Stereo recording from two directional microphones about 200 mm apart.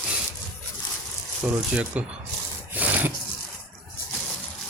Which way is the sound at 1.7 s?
5° right (ahead or behind).